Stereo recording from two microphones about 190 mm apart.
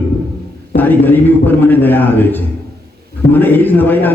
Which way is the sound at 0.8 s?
10° left (ahead or behind).